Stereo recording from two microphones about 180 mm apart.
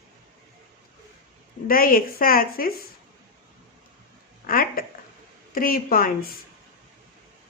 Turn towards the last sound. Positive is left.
turn(degrees=55)  # may be behind; listen again after turning